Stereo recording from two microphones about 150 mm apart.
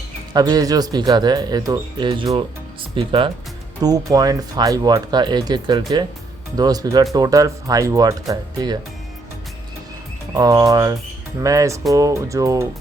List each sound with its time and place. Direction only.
0.3 s speech: 25° right (ahead or behind)
2.9 s speech: 35° right (ahead or behind)
3.8 s speech: 25° right (ahead or behind)
10.3 s speech: 25° right (ahead or behind)